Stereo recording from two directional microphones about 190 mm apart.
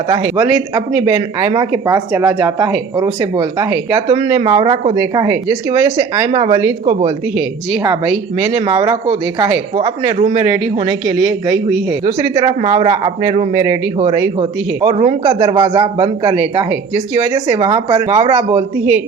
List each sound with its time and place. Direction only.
0.1 s a woman's voice: 15° right (ahead or behind)
8.5 s a woman's voice: 25° right (ahead or behind)
12.3 s a woman's voice: 25° right (ahead or behind)
14.9 s a woman's voice: 25° right (ahead or behind)
17.3 s a woman's voice: 25° right (ahead or behind)
18.5 s speech: 10° right (ahead or behind)